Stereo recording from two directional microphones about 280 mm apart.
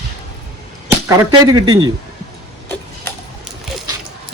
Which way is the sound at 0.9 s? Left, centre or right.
Centre.